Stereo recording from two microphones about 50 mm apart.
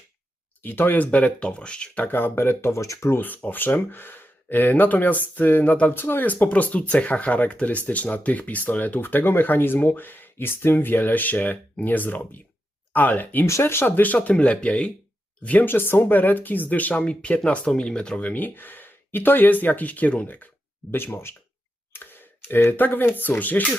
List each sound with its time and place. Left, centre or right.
0.6 s speech: left
2.0 s speech: left
3.2 s speech: left
6.2 s speech: left
13.4 s speech: left
14.3 s speech: left
15.4 s speech: left; by 18.2 s centre
18.2 s speech: left
21.1 s speech: left